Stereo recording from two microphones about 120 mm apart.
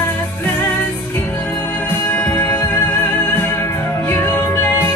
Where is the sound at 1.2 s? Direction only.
15° left (ahead or behind).